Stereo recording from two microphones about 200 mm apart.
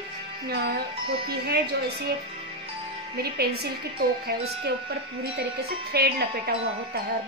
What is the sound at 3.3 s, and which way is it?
A woman's voice, 50° right (ahead or behind).